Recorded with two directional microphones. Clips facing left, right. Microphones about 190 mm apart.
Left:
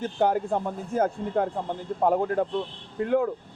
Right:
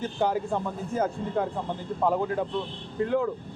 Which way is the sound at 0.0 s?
55° left (ahead or behind).